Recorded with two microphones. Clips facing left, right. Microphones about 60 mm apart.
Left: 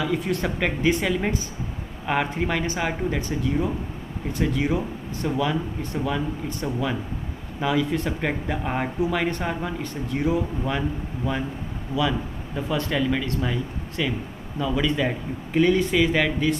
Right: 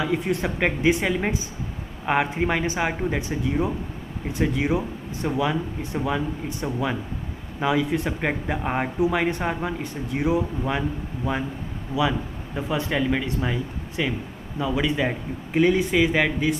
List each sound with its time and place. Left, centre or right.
0.0 s speech: right